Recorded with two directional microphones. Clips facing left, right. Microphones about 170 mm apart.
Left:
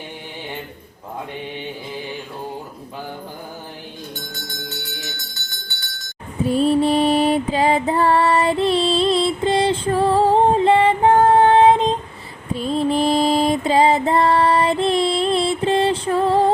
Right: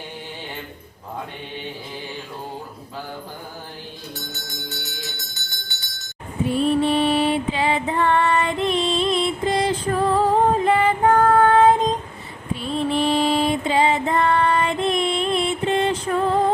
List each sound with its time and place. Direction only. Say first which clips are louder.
6.4 s music: left 3 dB; 35° left (ahead or behind)
12.5 s music: left 4 dB; 40° left (ahead or behind)